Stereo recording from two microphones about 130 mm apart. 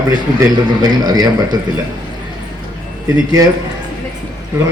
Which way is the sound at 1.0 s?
30° right (ahead or behind).